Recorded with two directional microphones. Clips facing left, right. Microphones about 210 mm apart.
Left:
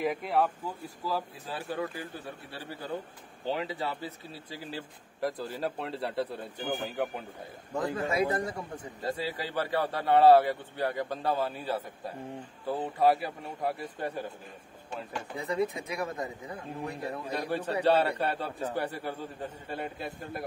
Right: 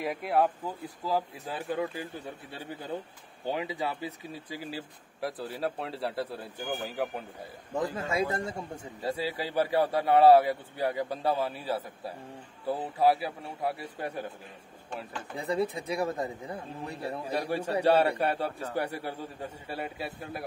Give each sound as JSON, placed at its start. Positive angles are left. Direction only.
{"t": 0.0, "sound": "speech", "side_deg": 0}
{"t": 1.5, "sound": "speech", "side_deg": -15}
{"t": 3.4, "sound": "speech", "side_deg": -15}
{"t": 7.7, "sound": "a man's voice", "side_deg": -20}
{"t": 9.0, "sound": "speech", "side_deg": -10}
{"t": 15.3, "sound": "speech", "side_deg": -30}
{"t": 17.3, "sound": "speech", "side_deg": -10}